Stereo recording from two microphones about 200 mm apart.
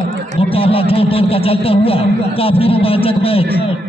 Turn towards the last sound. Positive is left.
turn(degrees=30)  # may be behind; listen again after turning